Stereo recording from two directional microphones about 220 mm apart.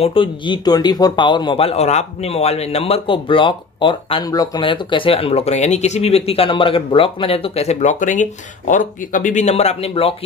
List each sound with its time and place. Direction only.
0.0 s speech: 25° left (ahead or behind)